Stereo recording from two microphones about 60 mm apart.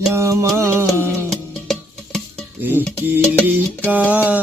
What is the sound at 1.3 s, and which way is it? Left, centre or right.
Music, centre.